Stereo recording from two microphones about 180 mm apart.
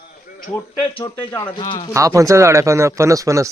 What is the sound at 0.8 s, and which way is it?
Speech, 25° left (ahead or behind).